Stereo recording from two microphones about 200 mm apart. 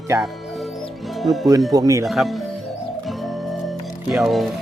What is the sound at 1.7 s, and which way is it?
Speech, 15° right (ahead or behind).